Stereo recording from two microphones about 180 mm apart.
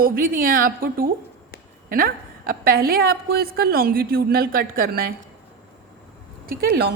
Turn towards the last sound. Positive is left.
turn(degrees=-55)  # may be behind; listen again after turning